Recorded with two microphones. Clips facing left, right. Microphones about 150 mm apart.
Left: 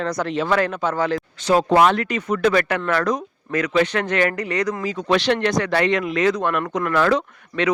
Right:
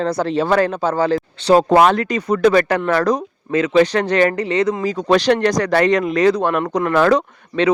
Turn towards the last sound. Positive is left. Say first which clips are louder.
# right 5 dB
turn(degrees=-40)  # may be behind; listen again after turning